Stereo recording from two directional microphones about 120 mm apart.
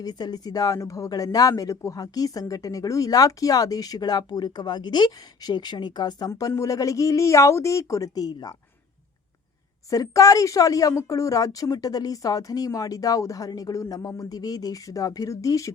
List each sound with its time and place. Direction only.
0.0 s a woman's voice: 35° left (ahead or behind)
9.9 s a woman's voice: 30° left (ahead or behind)